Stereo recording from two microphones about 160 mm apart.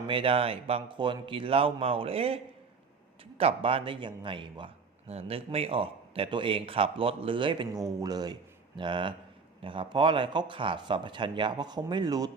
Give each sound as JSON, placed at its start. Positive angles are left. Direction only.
{"t": 0.1, "sound": "a man's voice", "side_deg": -35}